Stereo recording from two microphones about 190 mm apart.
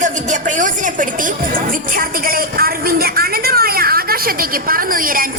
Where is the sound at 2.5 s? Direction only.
50° right (ahead or behind).